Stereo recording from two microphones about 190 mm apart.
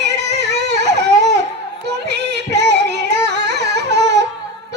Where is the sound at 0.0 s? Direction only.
65° right (ahead or behind).